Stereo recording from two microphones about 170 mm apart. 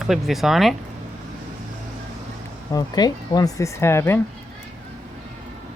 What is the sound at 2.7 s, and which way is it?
Speech, 25° left (ahead or behind).